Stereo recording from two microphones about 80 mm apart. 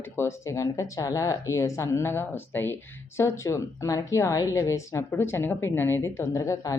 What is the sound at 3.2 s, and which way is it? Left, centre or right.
A woman's voice, left.